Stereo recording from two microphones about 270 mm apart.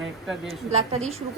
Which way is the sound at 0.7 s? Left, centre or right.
Right.